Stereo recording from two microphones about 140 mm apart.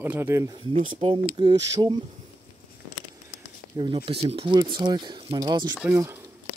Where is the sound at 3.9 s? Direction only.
45° right (ahead or behind).